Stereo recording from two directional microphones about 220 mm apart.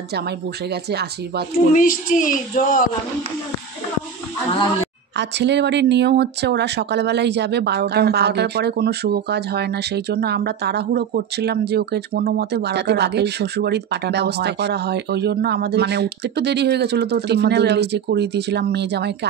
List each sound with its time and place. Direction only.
0.8 s speech: 50° right (ahead or behind)
1.7 s speech: 35° left (ahead or behind)
5.1 s speech: 50° right (ahead or behind)